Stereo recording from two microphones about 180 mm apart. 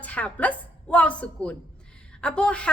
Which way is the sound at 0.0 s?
10° left (ahead or behind).